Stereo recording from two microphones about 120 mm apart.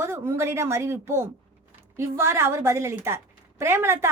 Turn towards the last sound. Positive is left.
turn(degrees=-20)  # may be behind; listen again after turning